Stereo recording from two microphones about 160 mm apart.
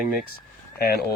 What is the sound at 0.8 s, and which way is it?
Speech, 80° left.